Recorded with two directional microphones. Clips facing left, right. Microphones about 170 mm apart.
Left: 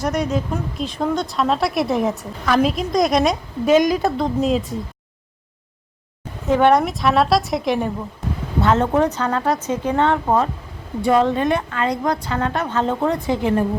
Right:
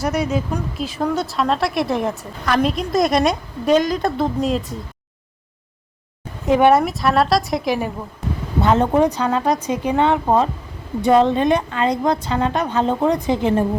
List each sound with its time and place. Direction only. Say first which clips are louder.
0.0 s speech: right 1 dB; 5° right (ahead or behind)
3.8 s speech: left 5 dB; 15° left (ahead or behind)
4.0 s speech: even; centre (ahead or behind)
6.5 s speech: right 1 dB; 10° right (ahead or behind)
8.6 s a woman's voice: right 1 dB; 15° right (ahead or behind)